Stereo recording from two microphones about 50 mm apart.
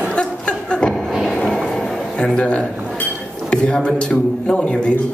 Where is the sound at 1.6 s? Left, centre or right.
Centre.